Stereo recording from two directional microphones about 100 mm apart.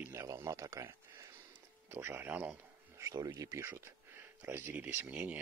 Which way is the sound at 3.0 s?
35° right (ahead or behind).